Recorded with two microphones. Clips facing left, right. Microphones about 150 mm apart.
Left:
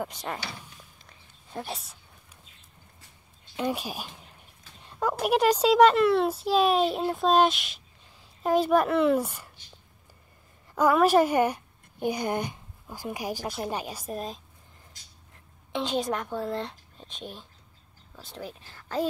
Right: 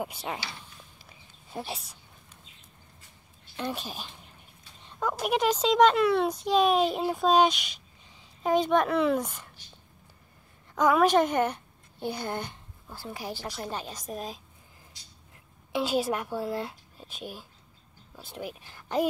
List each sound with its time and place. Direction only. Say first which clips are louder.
0.0 s a woman's voice: even; 10° right (ahead or behind)
0.9 s a sound: right 1 dB; 5° right (ahead or behind)
3.5 s speech: left 4 dB; 10° left (ahead or behind)
5.2 s a child's voice: left 4 dB; 5° left (ahead or behind)
10.7 s a woman's voice: left 1 dB; 5° left (ahead or behind)
15.7 s a woman's voice: right 1 dB; 5° right (ahead or behind)